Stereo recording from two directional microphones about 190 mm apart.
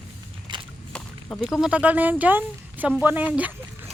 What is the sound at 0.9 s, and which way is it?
Speech, 5° left (ahead or behind).